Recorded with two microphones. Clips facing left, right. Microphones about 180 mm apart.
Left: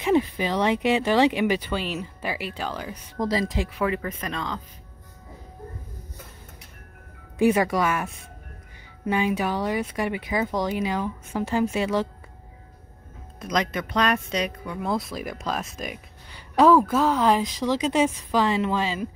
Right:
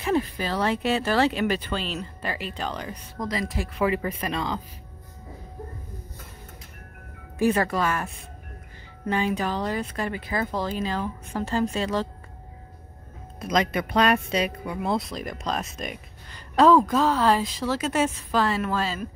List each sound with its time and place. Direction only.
0.0 s speech: 15° left (ahead or behind)
3.2 s speech: 25° left (ahead or behind)
3.7 s speech: 5° right (ahead or behind)
7.3 s speech: 10° left (ahead or behind)
13.4 s speech: 5° right (ahead or behind); by 19.0 s 15° left (ahead or behind)